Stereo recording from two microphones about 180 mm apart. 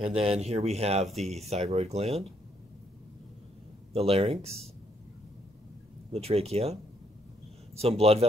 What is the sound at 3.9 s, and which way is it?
Speech, 35° right (ahead or behind).